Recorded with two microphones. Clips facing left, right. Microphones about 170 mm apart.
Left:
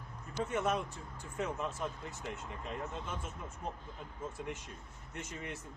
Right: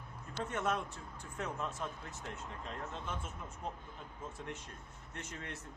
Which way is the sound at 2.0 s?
10° left (ahead or behind).